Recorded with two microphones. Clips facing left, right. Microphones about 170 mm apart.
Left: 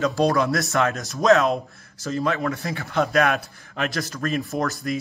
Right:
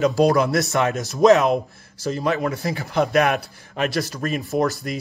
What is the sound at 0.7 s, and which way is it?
Speech, 20° right (ahead or behind).